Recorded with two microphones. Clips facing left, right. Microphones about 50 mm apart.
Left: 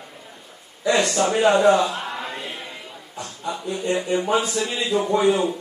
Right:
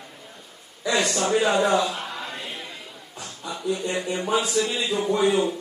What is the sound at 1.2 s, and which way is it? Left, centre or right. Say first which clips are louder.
Speech: left 3 dB; left.